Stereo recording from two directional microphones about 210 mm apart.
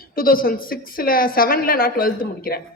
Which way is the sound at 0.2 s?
45° left (ahead or behind).